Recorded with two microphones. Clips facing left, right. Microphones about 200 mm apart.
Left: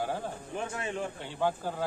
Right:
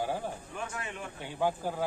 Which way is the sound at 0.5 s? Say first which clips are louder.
Left 5 dB; 30° left (ahead or behind).